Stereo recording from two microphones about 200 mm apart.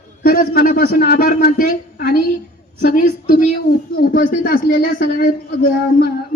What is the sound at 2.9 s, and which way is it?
Speech, 45° left (ahead or behind).